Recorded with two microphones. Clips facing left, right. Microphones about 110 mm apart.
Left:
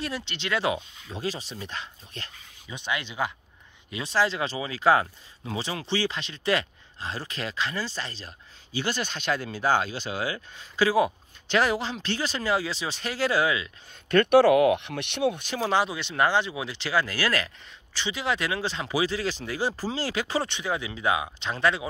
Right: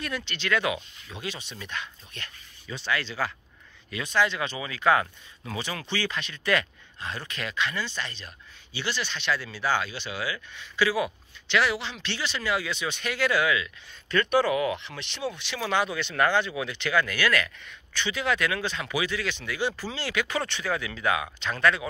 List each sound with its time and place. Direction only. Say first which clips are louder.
0.0 s speech: even; 25° left (ahead or behind)
2.7 s speech: right 2 dB; 20° left (ahead or behind)
3.9 s speech: even; 30° left (ahead or behind)
8.7 s speech: left 2 dB; 45° left (ahead or behind)
14.0 s speech: left 6 dB; 60° left (ahead or behind)
15.4 s speech: left 2 dB; 35° left (ahead or behind)